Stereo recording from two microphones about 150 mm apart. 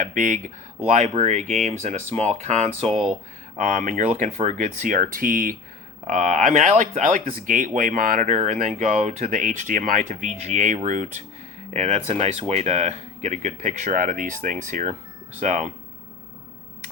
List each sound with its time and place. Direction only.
0.0 s speech: 60° right (ahead or behind)
6.1 s speech: 55° right (ahead or behind)